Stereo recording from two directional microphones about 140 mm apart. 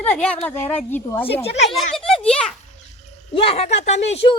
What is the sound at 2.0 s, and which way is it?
Speech, 5° left (ahead or behind).